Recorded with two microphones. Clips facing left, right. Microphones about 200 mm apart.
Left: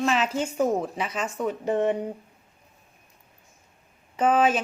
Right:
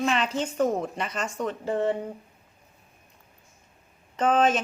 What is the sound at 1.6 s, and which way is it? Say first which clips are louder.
Speech: left 2 dB; 20° left (ahead or behind).